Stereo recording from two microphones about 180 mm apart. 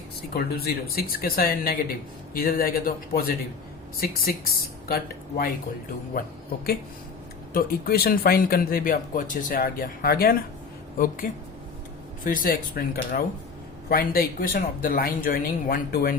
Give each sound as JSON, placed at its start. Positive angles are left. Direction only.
{"t": 0.2, "sound": "speech", "side_deg": 60}
{"t": 7.5, "sound": "speech", "side_deg": 55}